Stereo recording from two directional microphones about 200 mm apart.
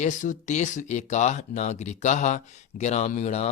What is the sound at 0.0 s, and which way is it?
Speech, 40° left (ahead or behind).